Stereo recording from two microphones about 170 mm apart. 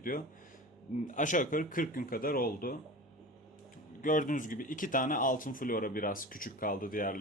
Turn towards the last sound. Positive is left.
turn(degrees=55)  # may be behind; listen again after turning